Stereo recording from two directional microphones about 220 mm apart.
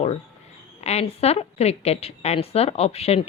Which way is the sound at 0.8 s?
30° left (ahead or behind).